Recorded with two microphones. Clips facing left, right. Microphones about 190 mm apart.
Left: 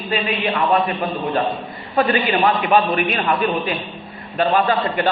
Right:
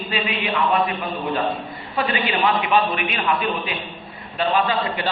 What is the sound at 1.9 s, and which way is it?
A man's voice, 45° left (ahead or behind).